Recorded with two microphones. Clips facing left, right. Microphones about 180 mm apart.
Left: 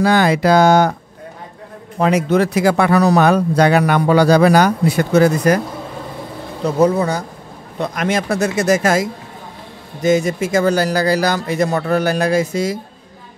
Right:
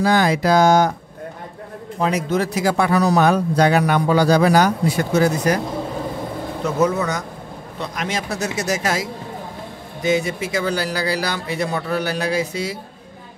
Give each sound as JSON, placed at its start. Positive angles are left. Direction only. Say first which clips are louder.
{"t": 0.0, "sound": "speech", "louder": "left 3 dB", "side_deg": 70}
{"t": 2.0, "sound": "speech", "louder": "left 5 dB", "side_deg": 70}
{"t": 6.6, "sound": "speech", "louder": "left 5 dB", "side_deg": 30}
{"t": 7.8, "sound": "speech", "louder": "left 7 dB", "side_deg": 55}